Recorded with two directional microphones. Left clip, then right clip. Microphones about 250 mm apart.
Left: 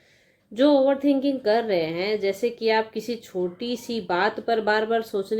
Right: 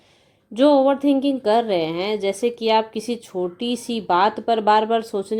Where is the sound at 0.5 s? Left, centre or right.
Right.